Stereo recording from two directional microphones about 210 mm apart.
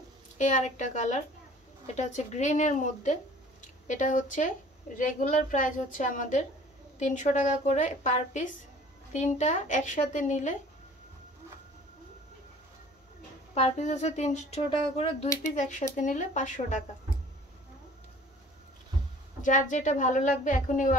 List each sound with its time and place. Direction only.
0.4 s a woman's voice: 35° left (ahead or behind)
13.6 s speech: 35° left (ahead or behind)
19.4 s speech: 35° left (ahead or behind)